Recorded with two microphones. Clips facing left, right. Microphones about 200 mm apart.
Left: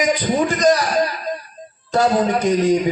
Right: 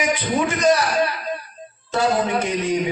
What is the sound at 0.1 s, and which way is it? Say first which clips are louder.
Music: left 3 dB; 40° left (ahead or behind).